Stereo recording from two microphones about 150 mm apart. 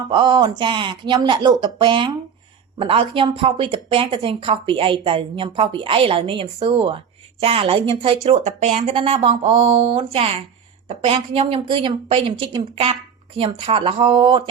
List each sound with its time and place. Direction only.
0.1 s a woman's voice: 30° right (ahead or behind); by 8.9 s 50° right (ahead or behind)
8.9 s a woman's voice: 40° right (ahead or behind)